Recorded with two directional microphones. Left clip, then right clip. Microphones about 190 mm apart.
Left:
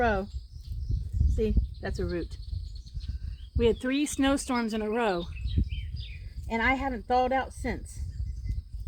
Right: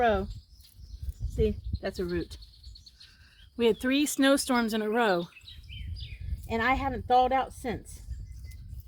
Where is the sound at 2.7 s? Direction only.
60° right (ahead or behind).